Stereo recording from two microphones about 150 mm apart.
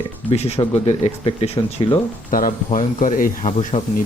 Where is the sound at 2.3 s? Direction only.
65° left (ahead or behind).